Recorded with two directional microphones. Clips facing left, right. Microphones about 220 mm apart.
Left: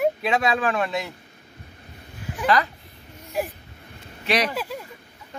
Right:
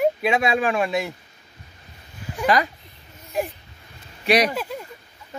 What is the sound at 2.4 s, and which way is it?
Speech, 15° right (ahead or behind).